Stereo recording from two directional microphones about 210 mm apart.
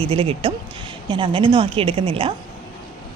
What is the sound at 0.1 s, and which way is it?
A woman's voice, 25° right (ahead or behind).